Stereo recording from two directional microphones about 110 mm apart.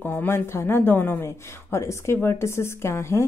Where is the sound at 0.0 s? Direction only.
20° left (ahead or behind).